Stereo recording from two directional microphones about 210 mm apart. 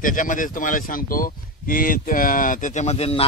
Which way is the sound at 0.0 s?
40° left (ahead or behind).